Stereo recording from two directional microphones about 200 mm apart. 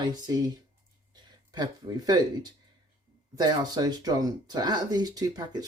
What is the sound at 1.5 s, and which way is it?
Speech, 20° right (ahead or behind).